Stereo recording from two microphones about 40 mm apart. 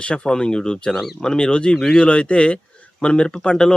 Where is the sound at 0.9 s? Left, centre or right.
Centre.